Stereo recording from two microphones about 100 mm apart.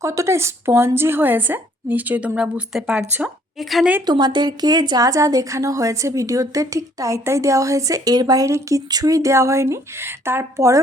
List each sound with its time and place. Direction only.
0.0 s a woman's voice: 30° right (ahead or behind); by 3.8 s centre (ahead or behind)
4.0 s a woman's voice: 45° right (ahead or behind); by 10.7 s 25° right (ahead or behind)